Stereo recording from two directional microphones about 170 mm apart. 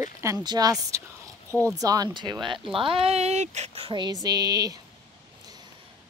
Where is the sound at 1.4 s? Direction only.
10° left (ahead or behind).